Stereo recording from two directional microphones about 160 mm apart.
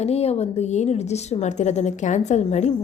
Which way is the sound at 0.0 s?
40° left (ahead or behind).